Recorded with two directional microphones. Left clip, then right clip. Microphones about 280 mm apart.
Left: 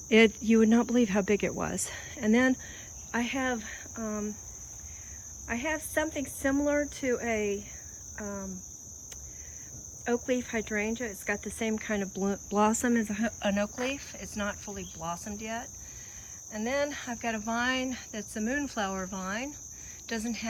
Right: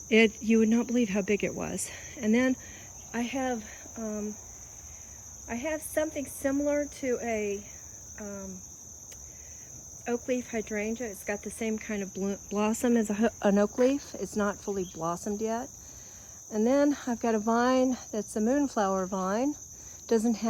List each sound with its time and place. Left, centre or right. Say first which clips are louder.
0.1 s speech: left 1 dB; centre
5.5 s speech: left 1 dB; centre
10.2 s speech: left 1 dB; centre
16.6 s speech: right 5 dB; centre